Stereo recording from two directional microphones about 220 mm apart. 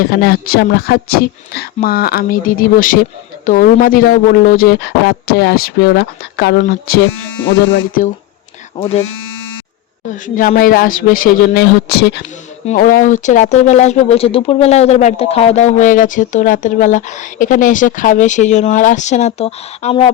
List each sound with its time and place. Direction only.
0.1 s a woman's voice: 45° left (ahead or behind)
7.6 s speech: 60° left (ahead or behind)
8.7 s speech: 25° left (ahead or behind)
10.1 s speech: 35° left (ahead or behind)
12.6 s speech: 35° left (ahead or behind)